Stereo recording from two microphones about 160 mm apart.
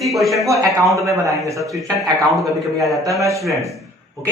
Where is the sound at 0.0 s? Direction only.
Centre (ahead or behind).